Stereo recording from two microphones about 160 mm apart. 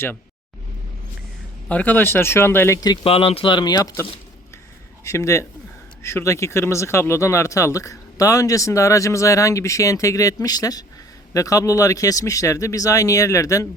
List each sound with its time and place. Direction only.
1.6 s speech: 10° left (ahead or behind)
5.0 s speech: 20° left (ahead or behind)